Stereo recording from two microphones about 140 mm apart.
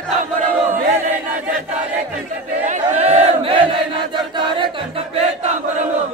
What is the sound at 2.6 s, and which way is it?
Battle cry, 55° right (ahead or behind).